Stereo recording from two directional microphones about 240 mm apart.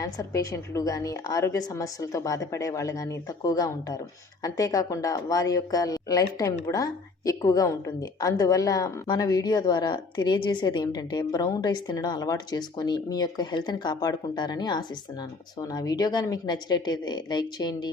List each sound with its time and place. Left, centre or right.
0.0 s a woman's voice: centre